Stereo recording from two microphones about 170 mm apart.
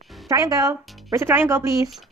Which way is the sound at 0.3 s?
20° right (ahead or behind).